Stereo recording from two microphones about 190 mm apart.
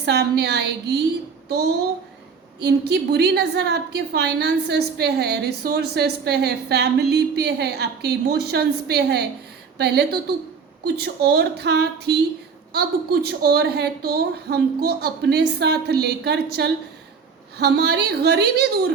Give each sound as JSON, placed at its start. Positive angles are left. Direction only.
{"t": 0.0, "sound": "a woman's voice", "side_deg": -60}